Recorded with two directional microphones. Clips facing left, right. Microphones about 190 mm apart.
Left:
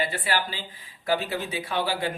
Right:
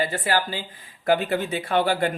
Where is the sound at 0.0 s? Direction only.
45° right (ahead or behind).